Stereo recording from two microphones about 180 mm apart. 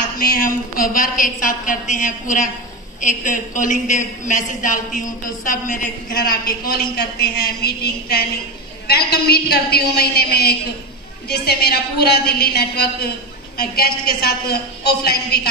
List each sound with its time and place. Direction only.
0.2 s a woman's voice: 55° left (ahead or behind)